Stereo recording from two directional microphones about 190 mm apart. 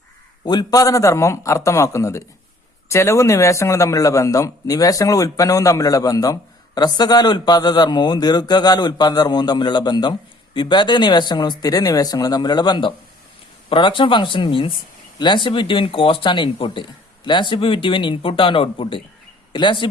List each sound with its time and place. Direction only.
0.4 s a man's voice: 20° left (ahead or behind)